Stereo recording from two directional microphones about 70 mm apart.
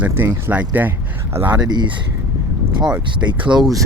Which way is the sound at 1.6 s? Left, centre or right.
Right.